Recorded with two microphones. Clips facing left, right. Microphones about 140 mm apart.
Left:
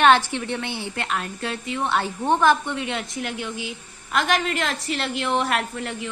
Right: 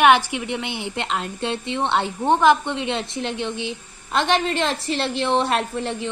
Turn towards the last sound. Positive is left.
turn(degrees=-30)  # may be behind; listen again after turning